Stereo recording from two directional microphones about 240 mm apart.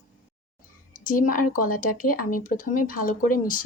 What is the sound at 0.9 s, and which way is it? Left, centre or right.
Speech, left.